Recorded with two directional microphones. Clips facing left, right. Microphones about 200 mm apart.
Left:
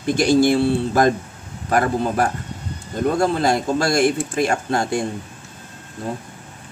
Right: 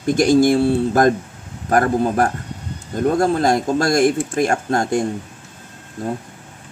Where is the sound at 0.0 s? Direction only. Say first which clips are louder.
Right 2 dB; 45° right (ahead or behind).